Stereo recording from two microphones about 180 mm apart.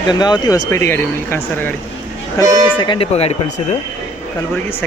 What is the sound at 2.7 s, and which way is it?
Speech, 25° left (ahead or behind).